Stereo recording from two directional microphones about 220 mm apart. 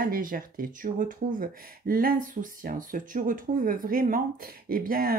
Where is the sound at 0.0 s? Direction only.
40° right (ahead or behind).